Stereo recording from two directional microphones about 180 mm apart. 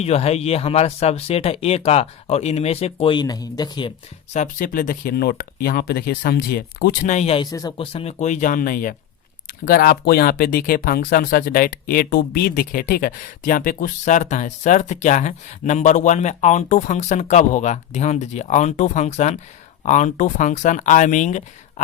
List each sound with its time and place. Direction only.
0.0 s speech: 35° left (ahead or behind)
4.4 s speech: 50° left (ahead or behind)
7.1 s speech: 35° left (ahead or behind)
7.5 s speech: 25° left (ahead or behind); by 21.4 s 45° left (ahead or behind)